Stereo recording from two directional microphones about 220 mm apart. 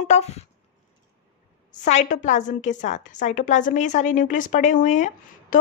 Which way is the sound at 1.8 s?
35° left (ahead or behind).